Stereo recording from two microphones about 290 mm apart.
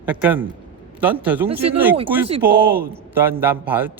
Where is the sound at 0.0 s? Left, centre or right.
Centre.